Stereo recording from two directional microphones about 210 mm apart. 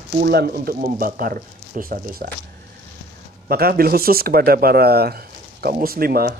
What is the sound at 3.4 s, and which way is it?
Speech, 45° right (ahead or behind).